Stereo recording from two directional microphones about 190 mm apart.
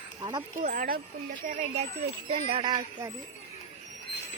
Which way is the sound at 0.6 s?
45° right (ahead or behind).